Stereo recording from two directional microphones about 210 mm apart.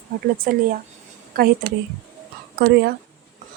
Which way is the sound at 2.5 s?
50° right (ahead or behind).